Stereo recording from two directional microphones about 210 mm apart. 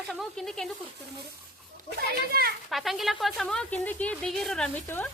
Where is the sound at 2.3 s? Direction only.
45° right (ahead or behind).